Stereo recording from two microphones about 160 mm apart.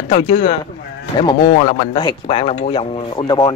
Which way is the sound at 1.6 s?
35° left (ahead or behind).